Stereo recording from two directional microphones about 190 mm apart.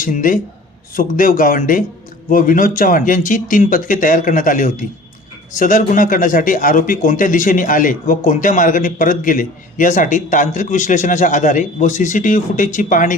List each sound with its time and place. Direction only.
0.0 s a man's voice: 45° left (ahead or behind)